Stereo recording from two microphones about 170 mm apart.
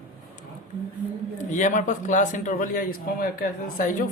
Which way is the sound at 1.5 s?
45° left (ahead or behind).